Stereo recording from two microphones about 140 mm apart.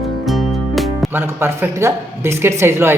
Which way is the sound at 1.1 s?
15° right (ahead or behind).